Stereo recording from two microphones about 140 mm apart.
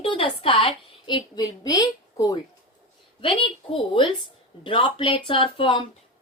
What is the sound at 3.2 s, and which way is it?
A woman's voice, 40° left (ahead or behind).